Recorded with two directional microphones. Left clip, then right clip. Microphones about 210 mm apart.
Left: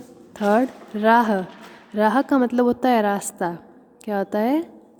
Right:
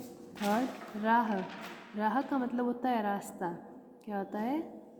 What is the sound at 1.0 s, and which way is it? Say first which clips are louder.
A woman's voice: left 12 dB; 50° left (ahead or behind).